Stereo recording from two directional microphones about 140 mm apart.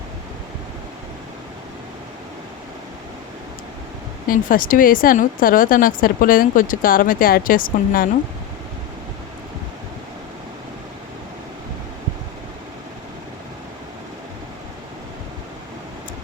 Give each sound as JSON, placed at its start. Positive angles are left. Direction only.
{"t": 4.3, "sound": "speech", "side_deg": 80}